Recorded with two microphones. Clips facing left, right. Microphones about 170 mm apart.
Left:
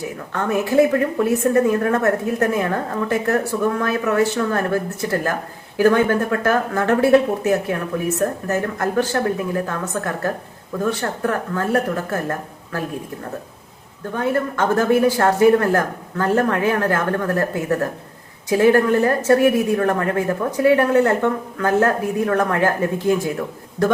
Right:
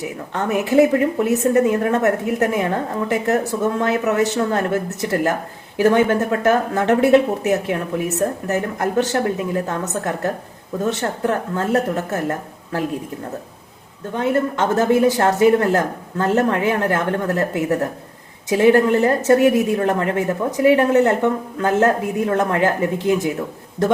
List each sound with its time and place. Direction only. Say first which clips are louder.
0.3 s a woman's voice: right 1 dB; 20° right (ahead or behind)
14.2 s a woman's voice: right 1 dB; 20° right (ahead or behind)